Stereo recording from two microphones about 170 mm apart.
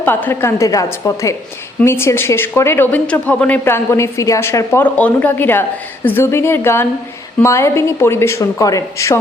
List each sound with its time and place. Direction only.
0.0 s speech: 10° left (ahead or behind)